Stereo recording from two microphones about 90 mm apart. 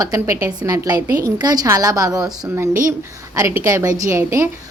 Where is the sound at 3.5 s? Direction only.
30° right (ahead or behind).